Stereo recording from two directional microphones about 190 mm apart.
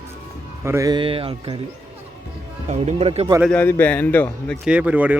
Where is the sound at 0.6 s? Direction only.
15° right (ahead or behind).